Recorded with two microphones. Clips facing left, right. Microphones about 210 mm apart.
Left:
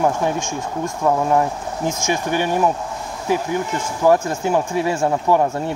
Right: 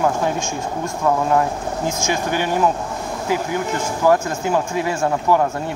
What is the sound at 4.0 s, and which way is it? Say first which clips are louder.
Speech: left 1 dB; 25° left (ahead or behind).